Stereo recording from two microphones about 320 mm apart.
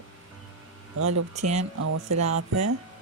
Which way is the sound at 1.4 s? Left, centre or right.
Right.